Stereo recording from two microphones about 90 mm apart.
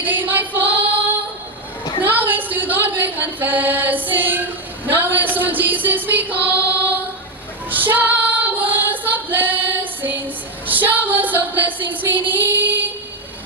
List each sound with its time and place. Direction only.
0.0 s female singing: 20° right (ahead or behind)
2.0 s music: 20° right (ahead or behind)
4.9 s a sound: 20° right (ahead or behind)
6.5 s music: 20° right (ahead or behind)
7.7 s female singing: 20° right (ahead or behind)